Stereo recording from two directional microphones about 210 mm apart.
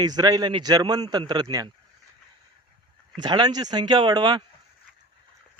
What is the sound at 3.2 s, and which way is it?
Speech, 20° right (ahead or behind).